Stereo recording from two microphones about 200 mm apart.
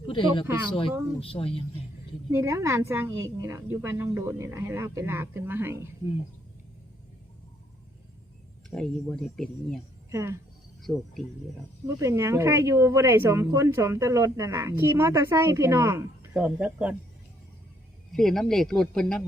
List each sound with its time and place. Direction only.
0.1 s speech: 25° left (ahead or behind)
2.3 s a woman's voice: 15° right (ahead or behind)
8.7 s speech: 5° left (ahead or behind)
10.1 s a woman's voice: 15° right (ahead or behind)
10.9 s speech: centre (ahead or behind)
11.9 s a woman's voice: 15° right (ahead or behind)
18.1 s speech: centre (ahead or behind)